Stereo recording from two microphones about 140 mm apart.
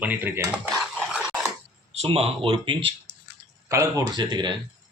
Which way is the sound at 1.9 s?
45° right (ahead or behind).